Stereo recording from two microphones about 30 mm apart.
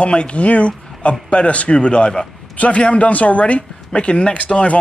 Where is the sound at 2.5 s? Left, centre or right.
Left.